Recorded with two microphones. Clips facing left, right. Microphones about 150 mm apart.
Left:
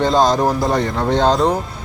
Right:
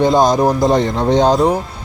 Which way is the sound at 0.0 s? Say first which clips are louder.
Right 3 dB; 15° right (ahead or behind).